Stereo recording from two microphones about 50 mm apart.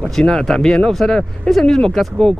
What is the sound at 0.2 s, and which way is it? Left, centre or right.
Speech, centre.